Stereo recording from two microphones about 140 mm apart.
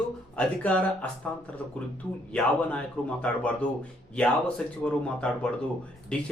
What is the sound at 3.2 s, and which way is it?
Speech, 10° left (ahead or behind).